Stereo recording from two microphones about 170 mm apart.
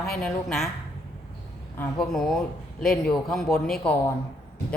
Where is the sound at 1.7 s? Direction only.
Centre (ahead or behind).